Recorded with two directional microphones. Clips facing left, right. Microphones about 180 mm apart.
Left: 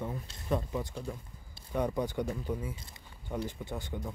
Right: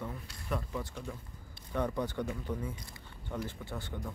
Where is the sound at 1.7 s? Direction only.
15° left (ahead or behind).